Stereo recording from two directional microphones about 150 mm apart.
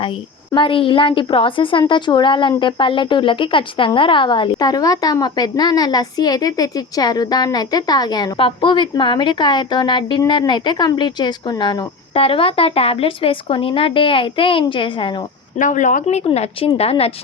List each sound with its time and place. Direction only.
0.5 s a woman's voice: 35° left (ahead or behind)
15.5 s a woman's voice: 55° left (ahead or behind); by 17.1 s 40° left (ahead or behind)